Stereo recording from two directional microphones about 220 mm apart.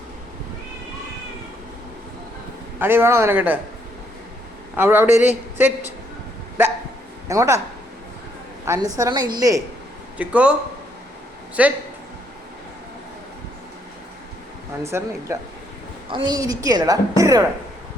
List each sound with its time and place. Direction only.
2.7 s a woman's voice: 10° right (ahead or behind)
4.8 s a woman's voice: 10° right (ahead or behind)
7.3 s a woman's voice: 15° right (ahead or behind)
8.6 s a woman's voice: 15° right (ahead or behind)
11.6 s a woman's voice: 5° right (ahead or behind)
14.8 s a woman's voice: 10° right (ahead or behind)